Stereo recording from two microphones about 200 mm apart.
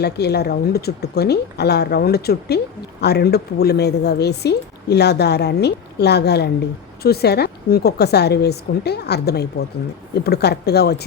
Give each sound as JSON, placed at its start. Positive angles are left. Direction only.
{"t": 0.0, "sound": "a woman's voice", "side_deg": 55}